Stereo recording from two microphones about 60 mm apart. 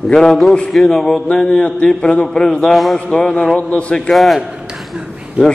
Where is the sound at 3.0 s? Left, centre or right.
Centre.